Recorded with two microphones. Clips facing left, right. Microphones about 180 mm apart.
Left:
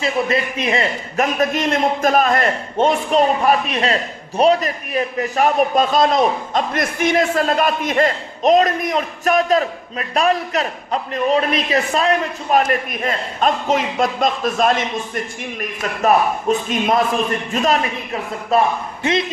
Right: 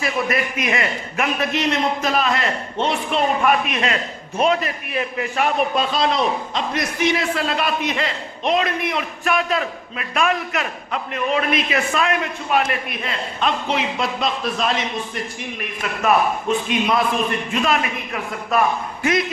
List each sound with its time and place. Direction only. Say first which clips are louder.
0.0 s a man's voice: left 3 dB; 25° left (ahead or behind); by 15.2 s 50° left (ahead or behind)
15.6 s a man's voice: left 3 dB; 40° left (ahead or behind)